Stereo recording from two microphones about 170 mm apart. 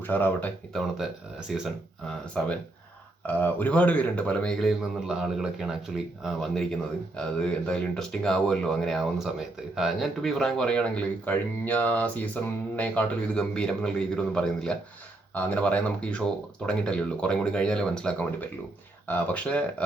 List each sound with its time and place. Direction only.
0.0 s speech: 10° left (ahead or behind)